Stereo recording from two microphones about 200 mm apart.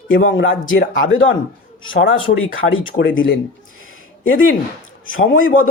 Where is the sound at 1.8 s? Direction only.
75° left (ahead or behind).